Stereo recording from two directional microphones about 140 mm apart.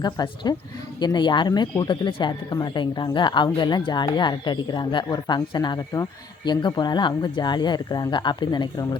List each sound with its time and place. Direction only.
0.0 s speech: 30° left (ahead or behind)